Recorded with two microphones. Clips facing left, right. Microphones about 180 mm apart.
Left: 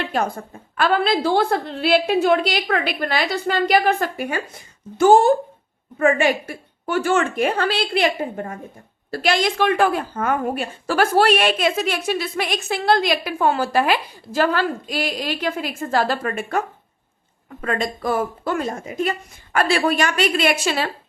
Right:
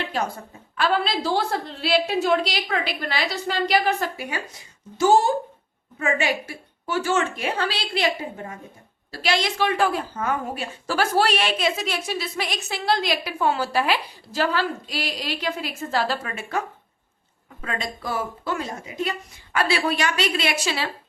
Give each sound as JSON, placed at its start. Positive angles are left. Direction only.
{"t": 0.1, "sound": "a woman's voice", "side_deg": 55}